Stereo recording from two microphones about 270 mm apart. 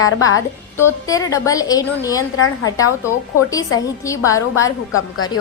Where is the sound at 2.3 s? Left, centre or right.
Left.